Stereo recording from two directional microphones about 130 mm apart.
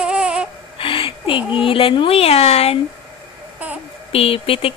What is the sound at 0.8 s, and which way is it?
Speech, 45° left (ahead or behind).